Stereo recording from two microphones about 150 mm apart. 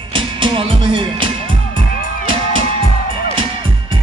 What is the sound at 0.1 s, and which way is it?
Music, 35° right (ahead or behind).